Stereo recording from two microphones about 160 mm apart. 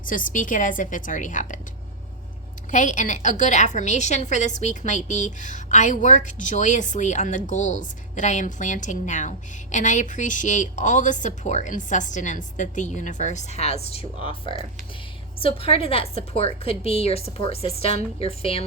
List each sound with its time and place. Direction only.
0.0 s a woman's voice: 55° left (ahead or behind)
2.7 s a woman's voice: 50° left (ahead or behind)